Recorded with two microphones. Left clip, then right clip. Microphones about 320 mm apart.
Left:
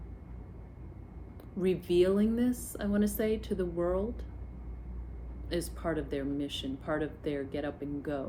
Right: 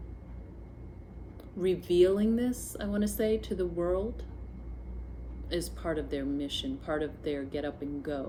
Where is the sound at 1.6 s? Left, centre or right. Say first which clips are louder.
Right 2 dB; centre.